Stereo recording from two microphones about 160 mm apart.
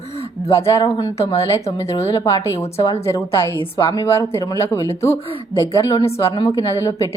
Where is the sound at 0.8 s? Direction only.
20° left (ahead or behind).